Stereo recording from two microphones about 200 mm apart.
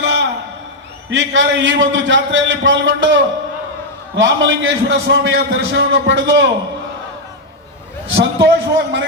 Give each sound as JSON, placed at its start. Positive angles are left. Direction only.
{"t": 0.0, "sound": "a sound", "side_deg": -60}
{"t": 1.1, "sound": "a man's voice", "side_deg": -70}
{"t": 8.1, "sound": "a man's voice", "side_deg": -65}